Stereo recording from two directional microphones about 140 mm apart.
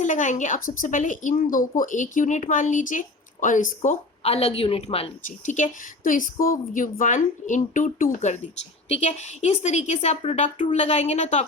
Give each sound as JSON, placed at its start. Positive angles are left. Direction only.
{"t": 0.0, "sound": "speech", "side_deg": 65}
{"t": 4.2, "sound": "a woman's voice", "side_deg": 45}
{"t": 5.5, "sound": "speech", "side_deg": 70}
{"t": 8.9, "sound": "a woman's voice", "side_deg": 55}